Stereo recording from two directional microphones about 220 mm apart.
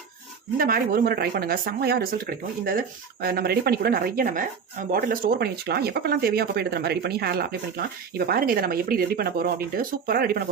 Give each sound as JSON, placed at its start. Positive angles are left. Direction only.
{"t": 0.5, "sound": "speech", "side_deg": -40}